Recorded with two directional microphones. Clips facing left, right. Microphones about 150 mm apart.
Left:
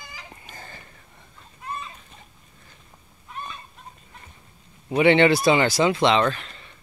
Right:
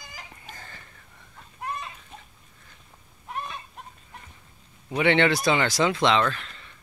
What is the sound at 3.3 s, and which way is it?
Fowl, 70° right (ahead or behind).